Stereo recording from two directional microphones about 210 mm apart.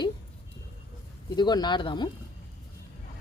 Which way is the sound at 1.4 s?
20° left (ahead or behind).